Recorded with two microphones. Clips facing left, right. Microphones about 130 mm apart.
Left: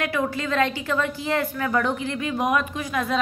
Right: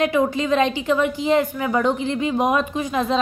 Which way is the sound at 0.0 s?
20° right (ahead or behind).